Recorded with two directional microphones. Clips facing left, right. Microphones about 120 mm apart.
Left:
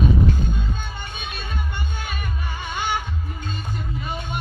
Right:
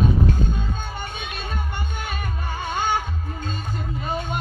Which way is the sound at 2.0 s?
45° right (ahead or behind).